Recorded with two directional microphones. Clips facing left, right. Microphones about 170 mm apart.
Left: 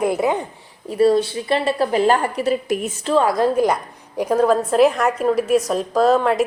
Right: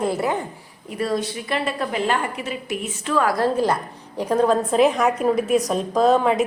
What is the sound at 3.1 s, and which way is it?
A woman's voice, 25° left (ahead or behind).